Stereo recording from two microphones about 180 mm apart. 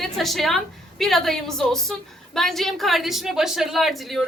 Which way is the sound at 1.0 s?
Centre (ahead or behind).